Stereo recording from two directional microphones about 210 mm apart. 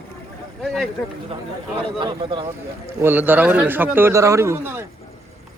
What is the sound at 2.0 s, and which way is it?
Speech, 25° right (ahead or behind).